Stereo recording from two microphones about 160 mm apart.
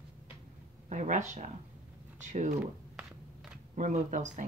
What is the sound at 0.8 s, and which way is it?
Speech, 50° right (ahead or behind).